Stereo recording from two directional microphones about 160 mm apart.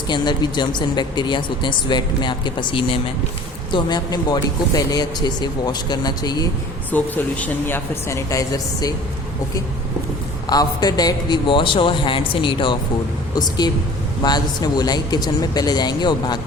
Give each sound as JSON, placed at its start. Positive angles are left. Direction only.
{"t": 0.1, "sound": "speech", "side_deg": 25}
{"t": 6.9, "sound": "speech", "side_deg": 10}
{"t": 10.5, "sound": "a man's voice", "side_deg": 25}